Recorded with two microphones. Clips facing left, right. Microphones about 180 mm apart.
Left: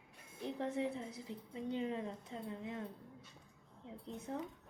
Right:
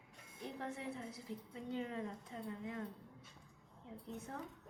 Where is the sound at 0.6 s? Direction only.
25° left (ahead or behind).